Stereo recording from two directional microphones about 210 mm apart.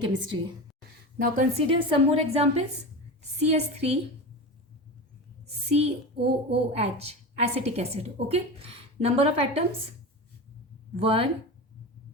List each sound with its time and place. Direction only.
0.0 s a woman's voice: 20° right (ahead or behind)
1.2 s a woman's voice: 35° right (ahead or behind)
5.6 s a woman's voice: 30° right (ahead or behind)
10.9 s a woman's voice: 25° right (ahead or behind)